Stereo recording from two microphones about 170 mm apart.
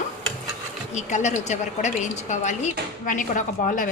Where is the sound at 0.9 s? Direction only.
45° left (ahead or behind).